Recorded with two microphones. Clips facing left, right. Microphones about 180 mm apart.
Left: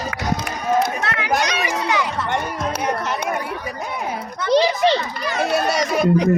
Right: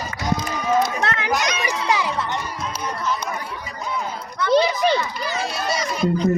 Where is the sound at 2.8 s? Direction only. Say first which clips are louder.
Left 1 dB; 70° left (ahead or behind).